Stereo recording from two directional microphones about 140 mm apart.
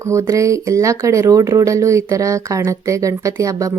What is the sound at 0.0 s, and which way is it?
Speech, 20° right (ahead or behind).